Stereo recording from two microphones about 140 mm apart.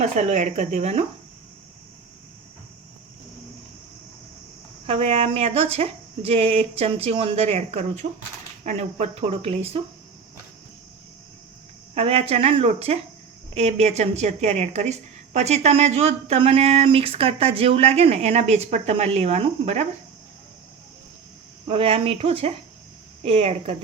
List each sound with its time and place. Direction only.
0.0 s speech: 55° right (ahead or behind)
4.9 s speech: 45° right (ahead or behind)
11.9 s speech: 45° right (ahead or behind)
21.7 s speech: 40° right (ahead or behind)